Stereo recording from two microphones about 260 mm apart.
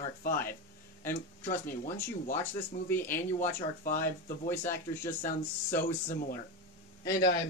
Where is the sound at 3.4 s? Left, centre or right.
Left.